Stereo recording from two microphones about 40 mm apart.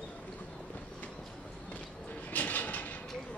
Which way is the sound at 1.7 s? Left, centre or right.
Left.